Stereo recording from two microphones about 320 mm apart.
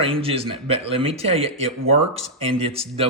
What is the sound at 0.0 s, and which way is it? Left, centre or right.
Speech, centre.